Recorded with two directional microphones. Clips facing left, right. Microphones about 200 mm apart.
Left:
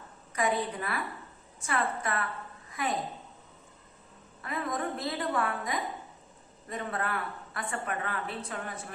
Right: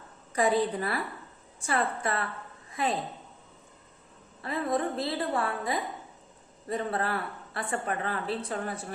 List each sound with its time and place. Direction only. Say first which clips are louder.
0.3 s speech: right 4 dB; 35° right (ahead or behind)
2.6 s a sound: right 3 dB; 30° right (ahead or behind)
4.4 s speech: right 4 dB; 30° right (ahead or behind)